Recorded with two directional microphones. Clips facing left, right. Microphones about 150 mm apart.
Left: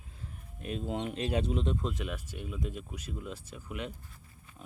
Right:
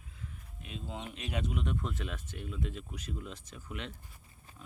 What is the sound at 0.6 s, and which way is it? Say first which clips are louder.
Speech: left 8 dB; 50° left (ahead or behind).